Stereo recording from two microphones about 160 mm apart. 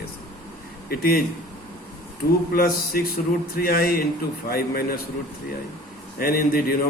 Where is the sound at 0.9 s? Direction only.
70° left (ahead or behind).